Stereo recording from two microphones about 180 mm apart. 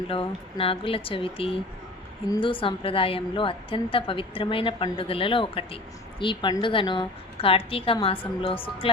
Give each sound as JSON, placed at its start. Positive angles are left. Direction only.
{"t": 0.1, "sound": "speech", "side_deg": 30}